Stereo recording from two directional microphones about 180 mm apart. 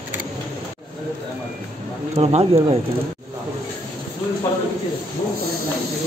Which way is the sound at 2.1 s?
35° right (ahead or behind).